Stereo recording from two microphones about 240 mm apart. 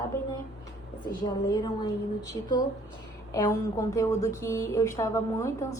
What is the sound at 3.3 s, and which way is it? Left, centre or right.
A woman's voice, centre.